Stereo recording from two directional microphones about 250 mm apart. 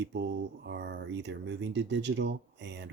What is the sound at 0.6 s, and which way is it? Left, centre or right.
Speech, right.